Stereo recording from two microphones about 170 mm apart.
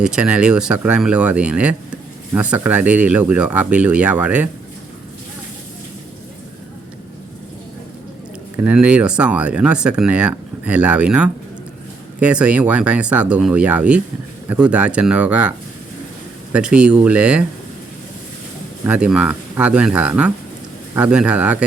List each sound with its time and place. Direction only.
0.0 s speech: 5° right (ahead or behind)
8.6 s speech: 5° right (ahead or behind)
18.9 s speech: 5° right (ahead or behind)